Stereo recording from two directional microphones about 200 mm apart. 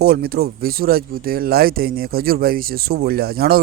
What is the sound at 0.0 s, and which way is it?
Speech, 50° right (ahead or behind).